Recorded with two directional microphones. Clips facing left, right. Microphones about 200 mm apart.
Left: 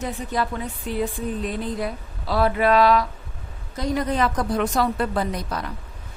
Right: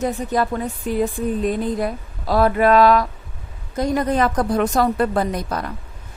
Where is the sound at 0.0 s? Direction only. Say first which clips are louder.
Right 5 dB; 40° right (ahead or behind).